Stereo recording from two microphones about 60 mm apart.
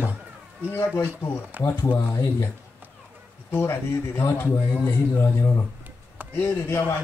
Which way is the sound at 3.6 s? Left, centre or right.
Left.